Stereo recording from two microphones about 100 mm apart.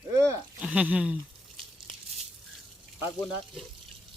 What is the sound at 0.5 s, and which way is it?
Speech, 15° right (ahead or behind).